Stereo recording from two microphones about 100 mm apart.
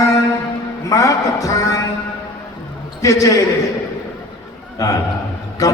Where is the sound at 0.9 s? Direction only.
35° left (ahead or behind).